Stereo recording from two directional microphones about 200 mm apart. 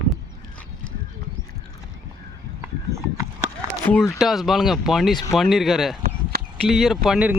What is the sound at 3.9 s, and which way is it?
Speech, 10° left (ahead or behind).